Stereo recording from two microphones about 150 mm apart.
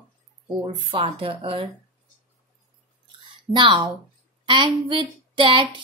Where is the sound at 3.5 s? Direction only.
35° right (ahead or behind).